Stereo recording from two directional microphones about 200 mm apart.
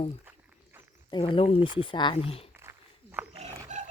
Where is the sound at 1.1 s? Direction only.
25° left (ahead or behind).